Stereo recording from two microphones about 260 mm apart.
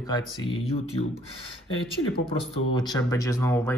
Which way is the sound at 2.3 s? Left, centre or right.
Left.